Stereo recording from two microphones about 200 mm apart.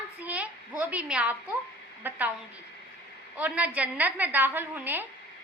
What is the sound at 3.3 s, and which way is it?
A woman's voice, 5° right (ahead or behind).